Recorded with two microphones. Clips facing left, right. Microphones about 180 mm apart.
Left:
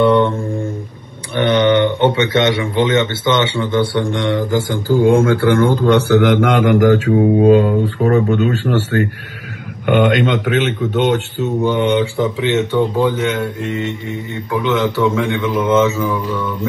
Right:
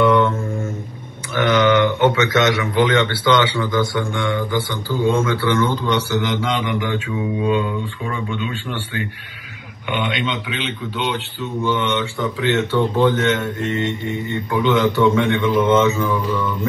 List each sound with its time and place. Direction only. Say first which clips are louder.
0.0 s mantra: left 3 dB; 30° left (ahead or behind)
1.3 s speech: left 3 dB; 30° left (ahead or behind)
12.4 s speech: left 1 dB; 20° left (ahead or behind)